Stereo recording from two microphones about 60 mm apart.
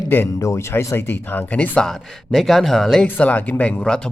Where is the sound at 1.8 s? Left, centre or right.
Centre.